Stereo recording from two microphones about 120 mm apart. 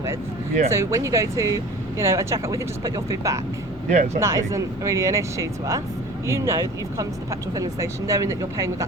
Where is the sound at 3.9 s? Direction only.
85° right.